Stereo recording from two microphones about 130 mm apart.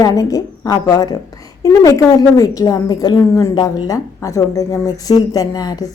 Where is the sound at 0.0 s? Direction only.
25° left (ahead or behind).